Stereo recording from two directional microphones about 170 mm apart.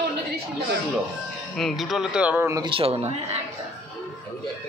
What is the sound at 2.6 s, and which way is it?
Speech, 30° right (ahead or behind).